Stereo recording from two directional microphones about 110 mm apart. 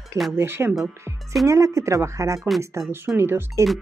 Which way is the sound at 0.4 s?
20° right (ahead or behind).